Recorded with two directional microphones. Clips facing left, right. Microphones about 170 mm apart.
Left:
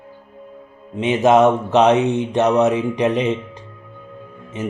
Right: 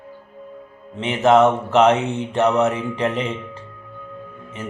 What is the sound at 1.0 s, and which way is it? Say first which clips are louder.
Speech: left 1 dB; 20° left (ahead or behind).